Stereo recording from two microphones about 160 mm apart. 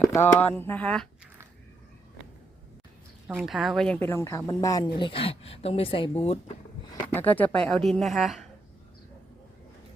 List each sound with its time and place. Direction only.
0.0 s speech: 15° left (ahead or behind)
3.2 s speech: 5° right (ahead or behind); by 6.4 s 35° left (ahead or behind)
7.1 s a woman's voice: 10° left (ahead or behind)